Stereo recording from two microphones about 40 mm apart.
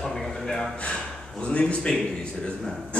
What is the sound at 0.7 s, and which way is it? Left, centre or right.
A man's voice, left.